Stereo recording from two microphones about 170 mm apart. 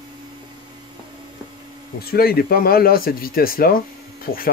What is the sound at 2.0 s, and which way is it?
Speech, 65° left (ahead or behind).